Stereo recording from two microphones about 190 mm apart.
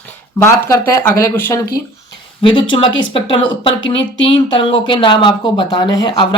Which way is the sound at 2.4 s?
25° left (ahead or behind).